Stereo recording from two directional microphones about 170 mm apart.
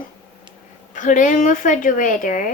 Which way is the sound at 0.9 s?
50° left (ahead or behind).